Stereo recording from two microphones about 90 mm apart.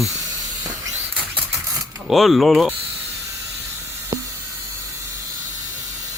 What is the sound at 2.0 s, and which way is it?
Speech, centre (ahead or behind).